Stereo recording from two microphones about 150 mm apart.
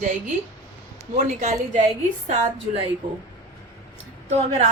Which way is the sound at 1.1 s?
55° right (ahead or behind).